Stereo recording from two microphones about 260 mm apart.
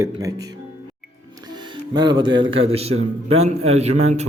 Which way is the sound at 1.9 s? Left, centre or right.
Centre.